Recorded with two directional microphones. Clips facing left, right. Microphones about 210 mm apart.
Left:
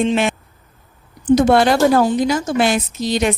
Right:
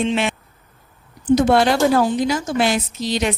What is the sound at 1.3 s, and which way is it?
Speech, 50° left (ahead or behind).